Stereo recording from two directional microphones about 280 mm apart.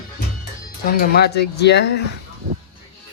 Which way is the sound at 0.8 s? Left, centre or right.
Left.